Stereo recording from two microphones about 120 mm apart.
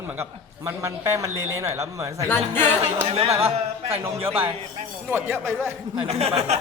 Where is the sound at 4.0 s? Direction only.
20° right (ahead or behind).